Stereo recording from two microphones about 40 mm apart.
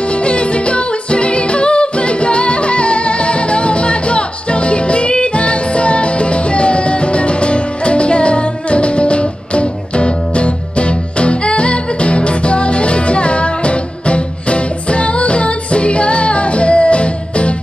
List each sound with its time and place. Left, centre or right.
0.1 s music: left